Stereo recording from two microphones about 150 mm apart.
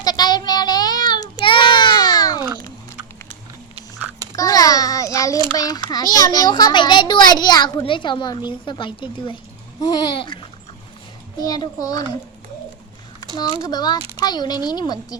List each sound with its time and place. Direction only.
0.0 s child singing: 25° left (ahead or behind)
4.4 s a sound: 25° left (ahead or behind)
5.5 s a child's voice: 25° left (ahead or behind)
13.6 s a child's voice: 25° left (ahead or behind)